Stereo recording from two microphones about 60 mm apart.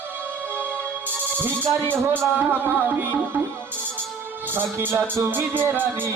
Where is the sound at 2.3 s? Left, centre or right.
Right.